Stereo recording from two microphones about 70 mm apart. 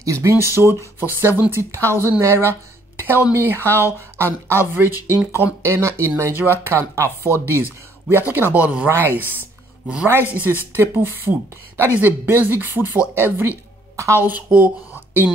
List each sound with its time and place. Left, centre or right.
0.0 s speech: right
0.3 s speech: right
3.0 s a sound: right
3.3 s speech: right
8.8 s speech: right
10.8 s speech: right
14.5 s speech: right